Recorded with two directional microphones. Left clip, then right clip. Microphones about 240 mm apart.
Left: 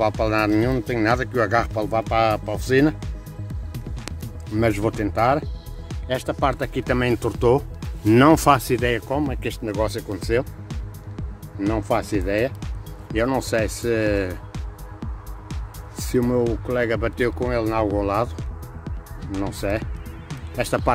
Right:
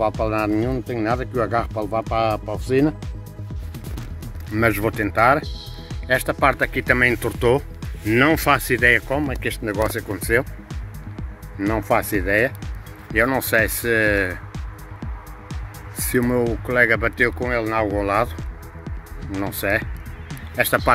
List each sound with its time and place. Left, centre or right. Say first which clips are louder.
0.0 s speech: left 1 dB; centre
3.7 s music: left 2 dB; centre
6.9 s speech: right 4 dB; centre
8.0 s speech: left 2 dB; left
8.5 s speech: right 6 dB; centre
18.9 s music: even; centre